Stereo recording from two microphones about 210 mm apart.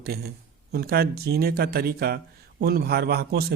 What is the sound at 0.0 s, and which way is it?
Speech, 50° right (ahead or behind).